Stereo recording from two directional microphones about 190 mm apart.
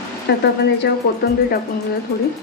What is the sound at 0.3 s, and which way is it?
Speech, 60° left (ahead or behind).